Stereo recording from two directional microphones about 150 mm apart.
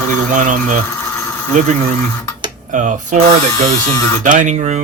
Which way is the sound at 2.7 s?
55° right (ahead or behind).